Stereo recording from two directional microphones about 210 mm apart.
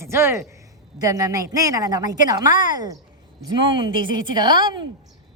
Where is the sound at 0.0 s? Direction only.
10° right (ahead or behind).